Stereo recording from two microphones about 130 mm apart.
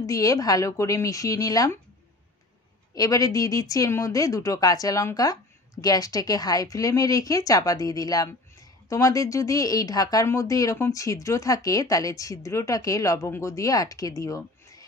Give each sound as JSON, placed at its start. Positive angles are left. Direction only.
{"t": 0.0, "sound": "speech", "side_deg": 25}
{"t": 2.9, "sound": "speech", "side_deg": 25}